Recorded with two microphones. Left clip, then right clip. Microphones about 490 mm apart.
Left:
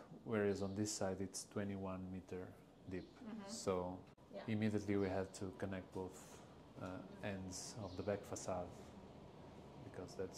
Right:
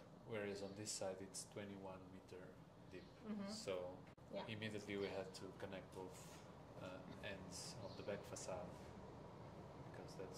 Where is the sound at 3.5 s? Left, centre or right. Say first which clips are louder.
Left 7 dB; left.